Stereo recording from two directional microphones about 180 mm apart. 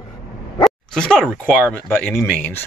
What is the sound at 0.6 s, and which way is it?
Speech, 5° left (ahead or behind).